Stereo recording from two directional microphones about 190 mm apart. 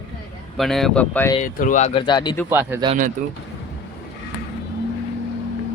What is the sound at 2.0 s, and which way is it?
Speech, 25° left (ahead or behind).